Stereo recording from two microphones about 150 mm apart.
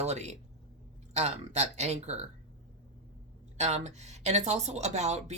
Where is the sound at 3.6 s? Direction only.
45° right (ahead or behind).